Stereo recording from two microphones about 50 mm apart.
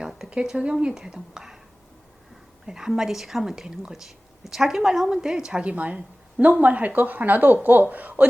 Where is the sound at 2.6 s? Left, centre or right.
Centre.